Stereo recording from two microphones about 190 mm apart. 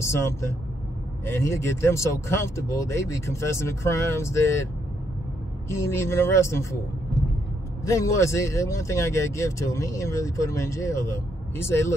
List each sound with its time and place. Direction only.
0.0 s speech: 15° left (ahead or behind)
5.7 s speech: 15° left (ahead or behind)
7.8 s speech: 15° left (ahead or behind)